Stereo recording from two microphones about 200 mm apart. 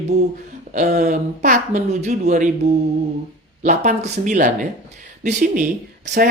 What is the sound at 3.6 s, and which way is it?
Speech, 40° right (ahead or behind).